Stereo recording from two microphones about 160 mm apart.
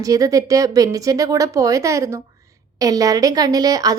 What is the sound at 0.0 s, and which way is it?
A woman's voice, 20° right (ahead or behind).